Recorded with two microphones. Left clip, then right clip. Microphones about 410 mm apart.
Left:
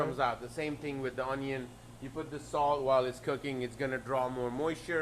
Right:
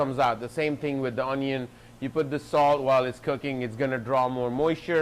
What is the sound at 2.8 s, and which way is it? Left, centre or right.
Speech, right.